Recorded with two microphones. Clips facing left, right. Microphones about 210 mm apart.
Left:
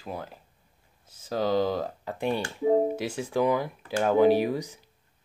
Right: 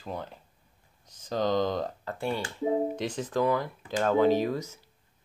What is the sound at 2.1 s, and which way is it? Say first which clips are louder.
Speech: left 4 dB; 15° left (ahead or behind).